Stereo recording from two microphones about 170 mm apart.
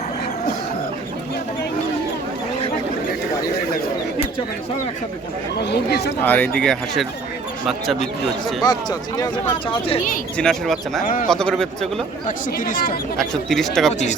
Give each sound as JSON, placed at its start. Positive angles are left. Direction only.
{"t": 5.6, "sound": "speech", "side_deg": 80}
{"t": 6.2, "sound": "speech", "side_deg": 10}
{"t": 8.6, "sound": "speech", "side_deg": 25}
{"t": 10.3, "sound": "speech", "side_deg": 5}
{"t": 11.0, "sound": "speech", "side_deg": 50}
{"t": 11.3, "sound": "speech", "side_deg": 5}
{"t": 12.5, "sound": "speech", "side_deg": 55}
{"t": 13.1, "sound": "speech", "side_deg": 0}